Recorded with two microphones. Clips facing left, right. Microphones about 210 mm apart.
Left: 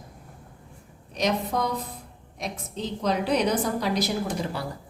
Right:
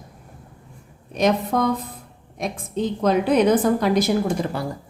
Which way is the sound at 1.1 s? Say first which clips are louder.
Right 6 dB; 50° right (ahead or behind).